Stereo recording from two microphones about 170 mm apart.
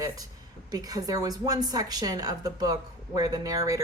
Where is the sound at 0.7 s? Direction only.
20° right (ahead or behind).